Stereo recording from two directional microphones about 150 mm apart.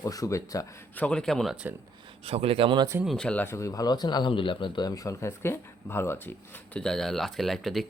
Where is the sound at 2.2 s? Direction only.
40° right (ahead or behind).